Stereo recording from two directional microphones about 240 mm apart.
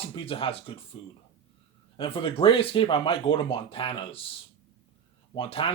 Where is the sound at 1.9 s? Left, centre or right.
Left.